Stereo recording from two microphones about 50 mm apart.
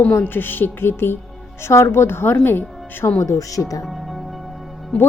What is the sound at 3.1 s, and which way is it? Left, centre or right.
Speech, left.